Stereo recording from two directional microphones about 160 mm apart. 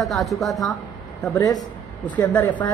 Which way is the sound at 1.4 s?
25° left (ahead or behind).